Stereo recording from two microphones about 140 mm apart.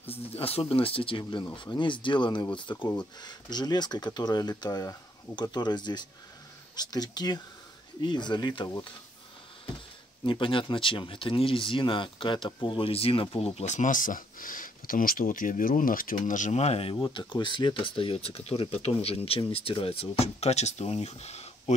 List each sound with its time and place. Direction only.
0.1 s speech: 45° left (ahead or behind)
10.2 s speech: 35° left (ahead or behind)
13.6 s speech: 60° left (ahead or behind)
16.9 s speech: 30° left (ahead or behind); by 21.7 s 50° left (ahead or behind)